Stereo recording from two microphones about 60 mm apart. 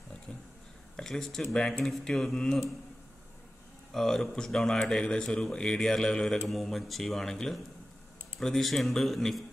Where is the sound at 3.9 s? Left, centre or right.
Centre.